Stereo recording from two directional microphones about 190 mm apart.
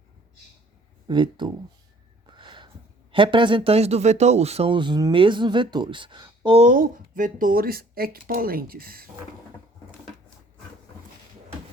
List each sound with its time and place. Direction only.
1.0 s speech: 25° right (ahead or behind)
2.2 s a sound: 25° right (ahead or behind)
3.1 s speech: 25° right (ahead or behind)
6.7 s speech: 45° right (ahead or behind)